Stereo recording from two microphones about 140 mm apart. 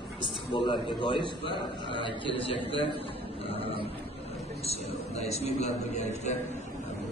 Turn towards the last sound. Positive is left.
turn(degrees=55)  # may be behind; listen again after turning